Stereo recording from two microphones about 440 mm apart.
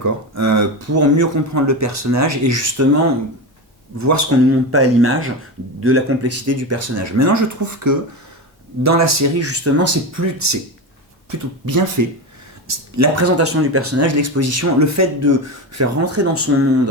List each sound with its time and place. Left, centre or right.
0.0 s speech: right